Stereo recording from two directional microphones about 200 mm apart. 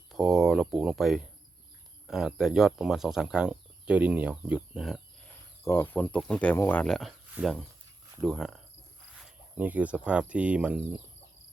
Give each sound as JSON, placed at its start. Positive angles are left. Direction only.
{"t": 0.1, "sound": "speech", "side_deg": 0}
{"t": 5.6, "sound": "speech", "side_deg": 10}